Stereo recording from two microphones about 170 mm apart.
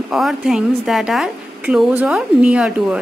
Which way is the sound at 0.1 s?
Centre (ahead or behind).